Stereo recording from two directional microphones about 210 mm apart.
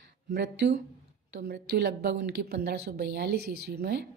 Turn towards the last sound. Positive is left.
turn(degrees=-50)  # may be behind; listen again after turning